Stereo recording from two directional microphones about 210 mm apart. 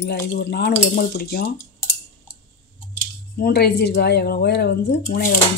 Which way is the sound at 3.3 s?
50° left (ahead or behind).